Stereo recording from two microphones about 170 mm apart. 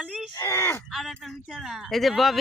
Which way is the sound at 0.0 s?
5° right (ahead or behind).